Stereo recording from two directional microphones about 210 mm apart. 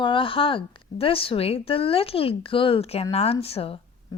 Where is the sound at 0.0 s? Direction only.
25° left (ahead or behind).